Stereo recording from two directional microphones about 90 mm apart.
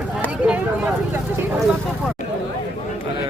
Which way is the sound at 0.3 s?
15° right (ahead or behind).